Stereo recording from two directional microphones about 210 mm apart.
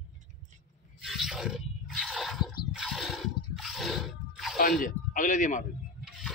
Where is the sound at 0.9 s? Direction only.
Centre (ahead or behind).